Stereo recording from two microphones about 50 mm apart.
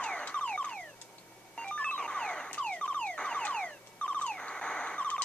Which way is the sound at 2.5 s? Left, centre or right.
Left.